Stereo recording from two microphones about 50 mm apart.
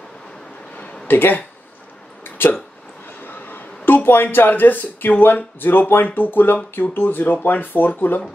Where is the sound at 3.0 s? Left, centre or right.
Left.